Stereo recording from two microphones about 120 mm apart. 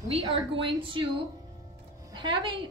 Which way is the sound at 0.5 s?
45° right (ahead or behind).